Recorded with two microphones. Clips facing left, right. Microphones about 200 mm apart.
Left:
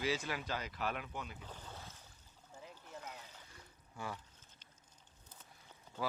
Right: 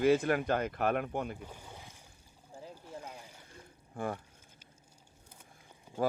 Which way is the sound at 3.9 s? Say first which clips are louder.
Right 9 dB; 50° right (ahead or behind).